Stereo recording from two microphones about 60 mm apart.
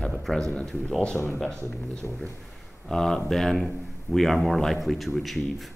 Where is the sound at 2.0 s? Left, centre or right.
Centre.